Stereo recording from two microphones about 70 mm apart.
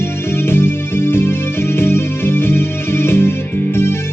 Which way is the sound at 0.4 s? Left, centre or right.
Left.